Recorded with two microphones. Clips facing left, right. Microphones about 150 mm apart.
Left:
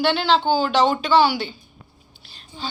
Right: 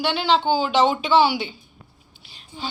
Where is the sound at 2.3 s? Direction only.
15° right (ahead or behind).